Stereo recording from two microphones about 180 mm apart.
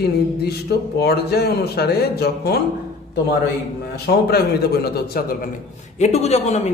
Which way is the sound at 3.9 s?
65° left (ahead or behind).